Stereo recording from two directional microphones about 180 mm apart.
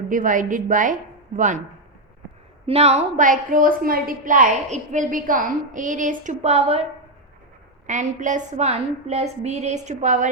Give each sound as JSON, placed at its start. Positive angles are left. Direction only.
{"t": 0.1, "sound": "a woman's voice", "side_deg": -45}
{"t": 2.6, "sound": "a woman's voice", "side_deg": -35}
{"t": 7.9, "sound": "a woman's voice", "side_deg": -45}